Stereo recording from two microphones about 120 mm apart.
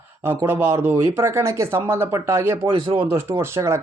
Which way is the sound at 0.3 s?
20° right (ahead or behind).